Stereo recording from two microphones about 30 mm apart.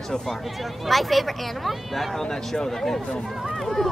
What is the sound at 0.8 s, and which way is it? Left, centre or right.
Speech, centre.